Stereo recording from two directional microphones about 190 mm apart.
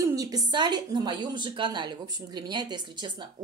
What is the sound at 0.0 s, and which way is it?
A woman's voice, 20° right (ahead or behind).